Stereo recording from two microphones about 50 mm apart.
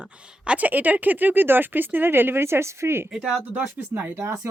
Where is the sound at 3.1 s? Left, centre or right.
Centre.